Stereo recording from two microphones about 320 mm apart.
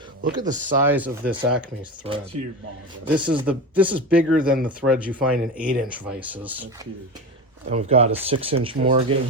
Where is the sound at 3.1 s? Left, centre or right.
Centre.